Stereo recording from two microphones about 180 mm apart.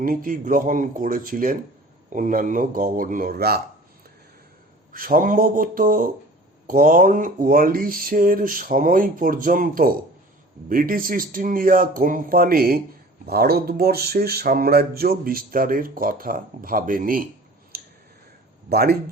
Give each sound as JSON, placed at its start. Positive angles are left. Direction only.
{"t": 0.0, "sound": "speech", "side_deg": -50}
{"t": 4.9, "sound": "speech", "side_deg": -50}
{"t": 17.7, "sound": "clicking", "side_deg": -60}
{"t": 18.7, "sound": "speech", "side_deg": -60}